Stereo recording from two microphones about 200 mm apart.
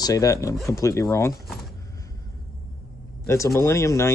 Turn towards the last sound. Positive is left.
turn(degrees=15)  # may be behind; listen again after turning